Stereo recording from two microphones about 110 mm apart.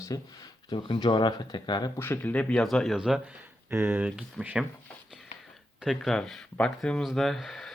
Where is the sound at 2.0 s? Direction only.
15° left (ahead or behind); by 3.2 s 5° right (ahead or behind).